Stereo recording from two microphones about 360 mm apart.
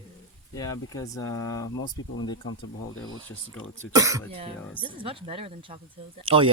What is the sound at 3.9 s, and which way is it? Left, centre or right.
Speech, centre.